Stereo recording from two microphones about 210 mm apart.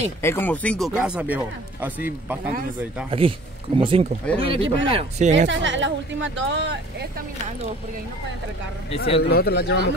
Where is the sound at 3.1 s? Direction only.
25° right (ahead or behind).